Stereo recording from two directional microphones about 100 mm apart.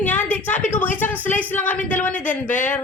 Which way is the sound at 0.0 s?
20° left (ahead or behind).